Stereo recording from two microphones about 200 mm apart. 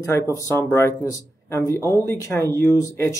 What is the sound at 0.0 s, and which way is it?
Speech, 15° left (ahead or behind).